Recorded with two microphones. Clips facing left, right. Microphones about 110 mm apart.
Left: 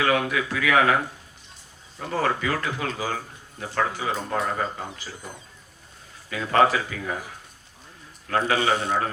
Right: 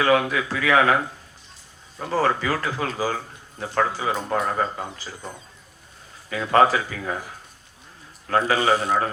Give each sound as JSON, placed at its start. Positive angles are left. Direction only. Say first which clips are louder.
{"t": 0.0, "sound": "speech", "louder": "right 3 dB", "side_deg": -35}
{"t": 2.0, "sound": "speech", "louder": "right 3 dB", "side_deg": -35}
{"t": 6.3, "sound": "speech", "louder": "right 2 dB", "side_deg": -35}
{"t": 8.3, "sound": "speech", "louder": "right 3 dB", "side_deg": -35}